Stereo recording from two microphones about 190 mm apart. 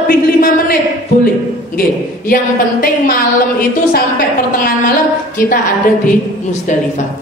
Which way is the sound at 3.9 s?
50° left (ahead or behind).